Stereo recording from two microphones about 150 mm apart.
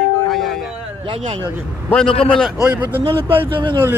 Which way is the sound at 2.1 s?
40° left (ahead or behind).